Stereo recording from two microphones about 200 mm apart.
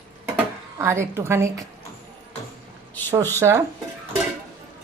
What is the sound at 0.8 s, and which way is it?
Speech, 15° right (ahead or behind).